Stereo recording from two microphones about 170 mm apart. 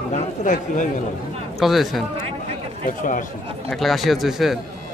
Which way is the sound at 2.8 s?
50° left (ahead or behind).